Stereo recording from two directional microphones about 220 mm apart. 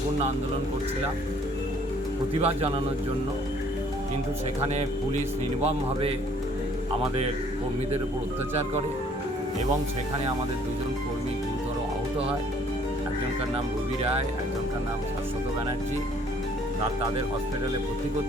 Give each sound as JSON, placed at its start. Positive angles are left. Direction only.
{"t": 2.4, "sound": "speech", "side_deg": -25}
{"t": 5.6, "sound": "speech", "side_deg": -25}